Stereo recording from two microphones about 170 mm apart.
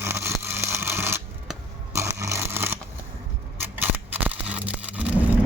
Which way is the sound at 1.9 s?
15° right (ahead or behind).